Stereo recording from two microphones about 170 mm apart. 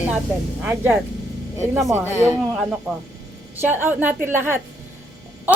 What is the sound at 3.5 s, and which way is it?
Speech, 10° right (ahead or behind).